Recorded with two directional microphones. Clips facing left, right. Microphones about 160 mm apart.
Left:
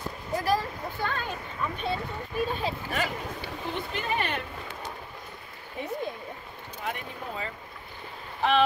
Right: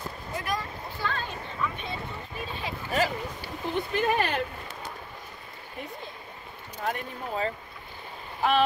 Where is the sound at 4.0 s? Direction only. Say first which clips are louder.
Right 5 dB; 40° right (ahead or behind).